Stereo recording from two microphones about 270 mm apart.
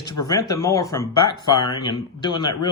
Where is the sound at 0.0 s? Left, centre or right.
Left.